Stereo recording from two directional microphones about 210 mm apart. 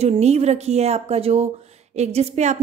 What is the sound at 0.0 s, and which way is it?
A woman's voice, 30° right (ahead or behind).